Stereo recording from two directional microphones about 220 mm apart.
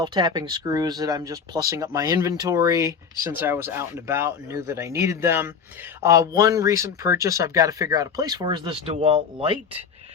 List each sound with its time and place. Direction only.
0.0 s speech: 25° right (ahead or behind)